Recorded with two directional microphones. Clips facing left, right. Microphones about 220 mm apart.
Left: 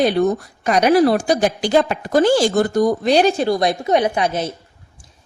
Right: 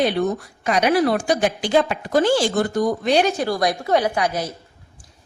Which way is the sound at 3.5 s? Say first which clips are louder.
Left 3 dB; 20° left (ahead or behind).